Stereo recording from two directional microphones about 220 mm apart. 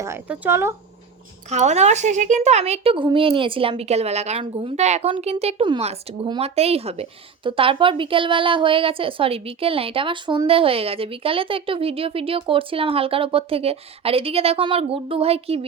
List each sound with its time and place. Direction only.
0.0 s speech: 10° right (ahead or behind)
1.5 s speech: 30° right (ahead or behind)